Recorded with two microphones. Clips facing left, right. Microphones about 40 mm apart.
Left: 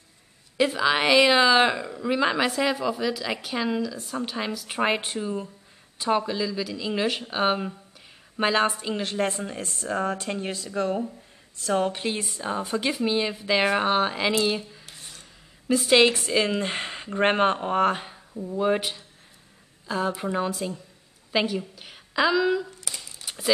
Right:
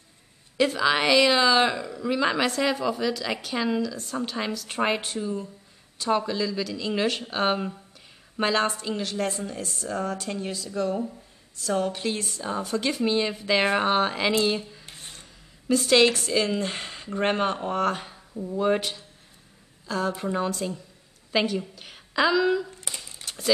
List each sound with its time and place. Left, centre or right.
0.6 s speech: centre
5.0 s speech: left
12.9 s speech: centre
14.9 s filing: right
15.7 s speech: centre
18.3 s a woman's voice: centre
23.2 s a sound: centre